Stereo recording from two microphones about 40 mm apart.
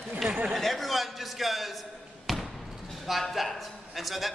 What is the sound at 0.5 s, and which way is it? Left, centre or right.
A man's voice, centre.